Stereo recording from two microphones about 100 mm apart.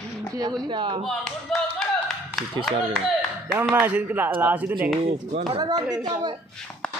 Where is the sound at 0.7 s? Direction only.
55° right (ahead or behind).